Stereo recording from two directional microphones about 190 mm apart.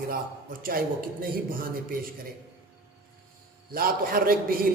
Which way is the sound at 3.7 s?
50° right (ahead or behind).